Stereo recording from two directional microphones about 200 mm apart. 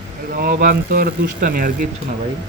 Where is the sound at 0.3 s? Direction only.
45° right (ahead or behind).